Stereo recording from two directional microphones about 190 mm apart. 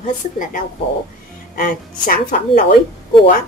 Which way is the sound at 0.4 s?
45° left (ahead or behind).